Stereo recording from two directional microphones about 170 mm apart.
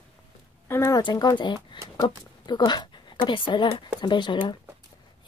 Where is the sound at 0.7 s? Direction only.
15° left (ahead or behind).